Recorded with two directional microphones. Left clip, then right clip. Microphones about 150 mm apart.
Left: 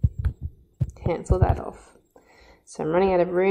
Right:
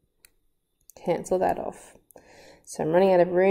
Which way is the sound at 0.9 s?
10° right (ahead or behind).